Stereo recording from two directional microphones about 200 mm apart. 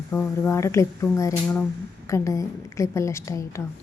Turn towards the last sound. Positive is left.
turn(degrees=15)  # may be behind; listen again after turning